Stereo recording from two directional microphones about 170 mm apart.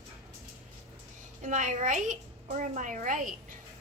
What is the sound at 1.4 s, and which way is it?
A child's voice, 50° right (ahead or behind).